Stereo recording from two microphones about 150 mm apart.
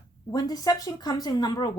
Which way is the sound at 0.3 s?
25° left (ahead or behind).